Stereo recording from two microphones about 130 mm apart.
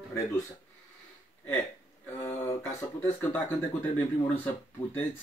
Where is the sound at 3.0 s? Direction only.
15° left (ahead or behind).